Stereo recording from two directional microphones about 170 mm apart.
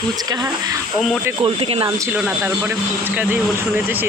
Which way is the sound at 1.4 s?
35° right (ahead or behind).